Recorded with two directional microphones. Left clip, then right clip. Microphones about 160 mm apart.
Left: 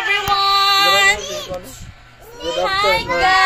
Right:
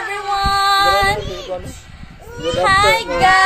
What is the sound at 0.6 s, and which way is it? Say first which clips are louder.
Female singing: right 2 dB; 25° right (ahead or behind).